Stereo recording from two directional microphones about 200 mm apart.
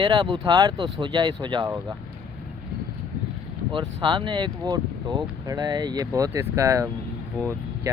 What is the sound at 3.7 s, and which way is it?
Speech, 25° right (ahead or behind).